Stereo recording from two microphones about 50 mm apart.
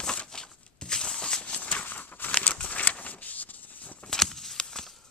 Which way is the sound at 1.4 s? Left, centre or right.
Left.